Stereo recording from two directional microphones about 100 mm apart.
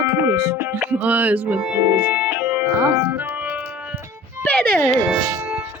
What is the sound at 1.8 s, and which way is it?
Music, 15° right (ahead or behind).